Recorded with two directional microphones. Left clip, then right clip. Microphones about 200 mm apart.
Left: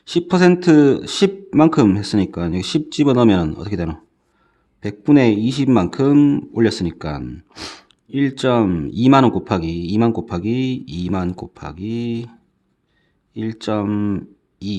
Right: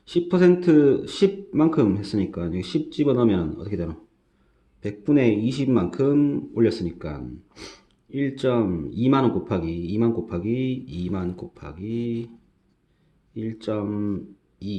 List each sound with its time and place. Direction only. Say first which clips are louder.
0.0 s speech: left 4 dB; 40° left (ahead or behind)